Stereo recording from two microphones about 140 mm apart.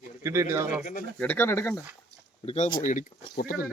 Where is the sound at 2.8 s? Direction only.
70° left (ahead or behind); by 3.7 s 85° left.